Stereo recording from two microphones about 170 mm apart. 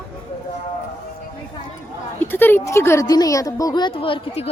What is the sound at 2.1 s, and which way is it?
A woman's voice, 10° left (ahead or behind).